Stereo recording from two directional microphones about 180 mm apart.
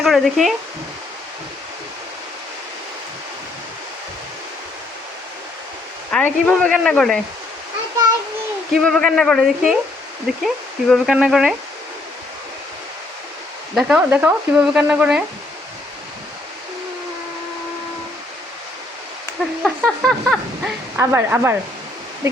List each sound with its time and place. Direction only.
0.0 s speech: centre (ahead or behind)
6.1 s speech: 5° left (ahead or behind)
8.7 s speech: 5° left (ahead or behind)
13.7 s speech: 5° right (ahead or behind)
19.6 s speech: centre (ahead or behind)
20.9 s speech: 15° right (ahead or behind)